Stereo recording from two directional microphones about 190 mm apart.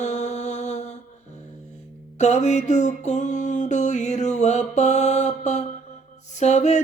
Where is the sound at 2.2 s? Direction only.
35° left (ahead or behind).